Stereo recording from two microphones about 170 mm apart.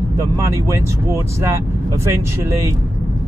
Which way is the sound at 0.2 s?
20° right (ahead or behind).